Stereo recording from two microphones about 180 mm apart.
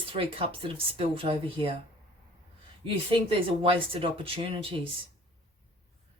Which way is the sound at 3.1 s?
30° right (ahead or behind).